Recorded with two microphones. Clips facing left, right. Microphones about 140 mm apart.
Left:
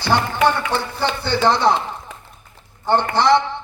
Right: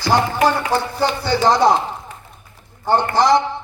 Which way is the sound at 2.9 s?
65° left (ahead or behind).